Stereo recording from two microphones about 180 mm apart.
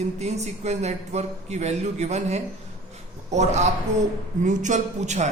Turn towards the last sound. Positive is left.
turn(degrees=-40)  # may be behind; listen again after turning